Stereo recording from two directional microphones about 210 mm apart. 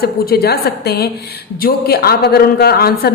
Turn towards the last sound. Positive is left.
turn(degrees=50)  # may be behind; listen again after turning